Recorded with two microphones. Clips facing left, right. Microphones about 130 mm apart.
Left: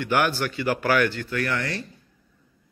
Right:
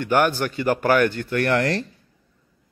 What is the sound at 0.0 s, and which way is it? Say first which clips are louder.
Speech: right 3 dB; 45° right (ahead or behind).